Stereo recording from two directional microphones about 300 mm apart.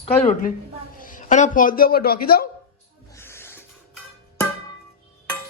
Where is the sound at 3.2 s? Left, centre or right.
Centre.